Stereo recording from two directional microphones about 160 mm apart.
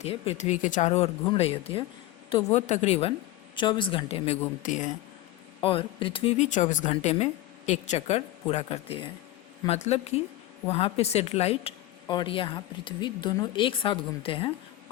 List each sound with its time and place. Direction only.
0.0 s a woman's voice: 40° left (ahead or behind)
3.5 s a woman's voice: 30° left (ahead or behind)
4.6 s speech: 50° left (ahead or behind)
5.6 s a woman's voice: 35° left (ahead or behind)